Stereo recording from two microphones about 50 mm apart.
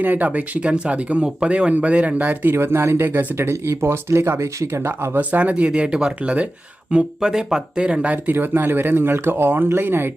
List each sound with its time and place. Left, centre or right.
0.0 s speech: right
2.6 s speech: right
5.4 s speech: right
7.9 s speech: right
8.3 s speech: right